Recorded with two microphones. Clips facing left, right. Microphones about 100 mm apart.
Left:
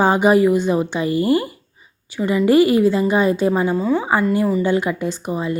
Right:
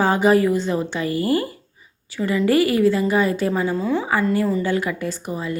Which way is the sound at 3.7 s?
10° left (ahead or behind).